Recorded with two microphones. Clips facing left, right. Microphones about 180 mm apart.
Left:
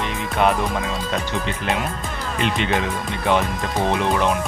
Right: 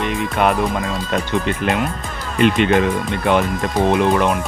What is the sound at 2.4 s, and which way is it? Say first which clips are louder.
Speech: right 8 dB; 55° right (ahead or behind).